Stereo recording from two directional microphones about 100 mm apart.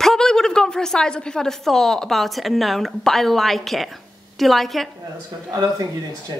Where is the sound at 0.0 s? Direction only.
5° left (ahead or behind).